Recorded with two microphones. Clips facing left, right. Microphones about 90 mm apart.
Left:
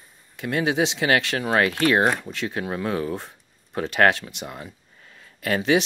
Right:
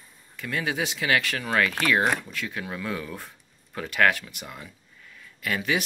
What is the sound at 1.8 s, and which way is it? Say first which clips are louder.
Speech: left 4 dB; 45° left (ahead or behind).